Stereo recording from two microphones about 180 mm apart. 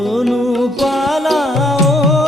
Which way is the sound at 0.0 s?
Centre (ahead or behind).